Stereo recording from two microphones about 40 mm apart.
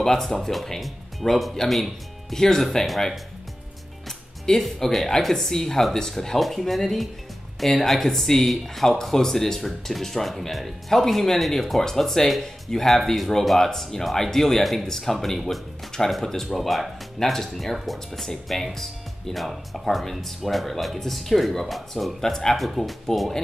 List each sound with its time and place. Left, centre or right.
0.0 s speech: centre
4.5 s speech: centre
22.2 s speech: centre
23.1 s speech: centre